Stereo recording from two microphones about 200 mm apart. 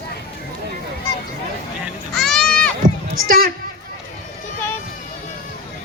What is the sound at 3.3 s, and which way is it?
Speech, 50° right (ahead or behind).